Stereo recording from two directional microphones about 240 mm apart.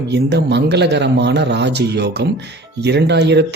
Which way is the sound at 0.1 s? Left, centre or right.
Right.